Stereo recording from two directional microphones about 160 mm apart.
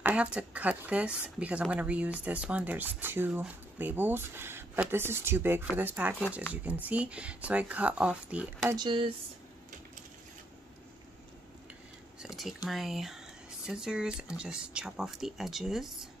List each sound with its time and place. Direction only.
0.0 s speech: 10° right (ahead or behind)
8.7 s speech: 30° right (ahead or behind)
12.2 s a sound: 5° right (ahead or behind)
12.6 s speech: centre (ahead or behind)